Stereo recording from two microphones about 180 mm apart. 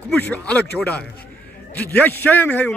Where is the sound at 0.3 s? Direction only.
10° left (ahead or behind).